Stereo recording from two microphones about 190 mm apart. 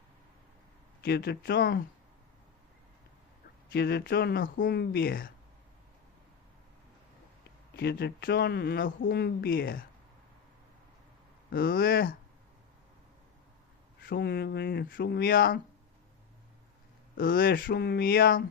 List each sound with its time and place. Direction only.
1.0 s speech: 55° left (ahead or behind)
3.7 s speech: 55° left (ahead or behind)
7.8 s speech: 60° left (ahead or behind)
11.5 s speech: 50° left (ahead or behind)
14.0 s speech: 55° left (ahead or behind)
17.2 s speech: 50° left (ahead or behind)